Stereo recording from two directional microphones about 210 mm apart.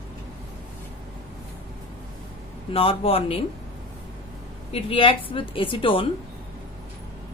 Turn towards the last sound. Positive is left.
turn(degrees=25)  # may be behind; listen again after turning